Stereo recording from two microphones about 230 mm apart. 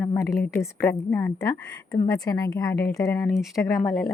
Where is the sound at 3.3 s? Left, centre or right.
Centre.